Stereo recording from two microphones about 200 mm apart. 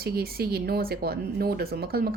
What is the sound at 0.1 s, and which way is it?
A woman's voice, 50° right (ahead or behind).